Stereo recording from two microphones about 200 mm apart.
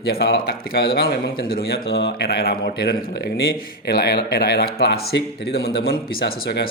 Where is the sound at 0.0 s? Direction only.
55° left (ahead or behind).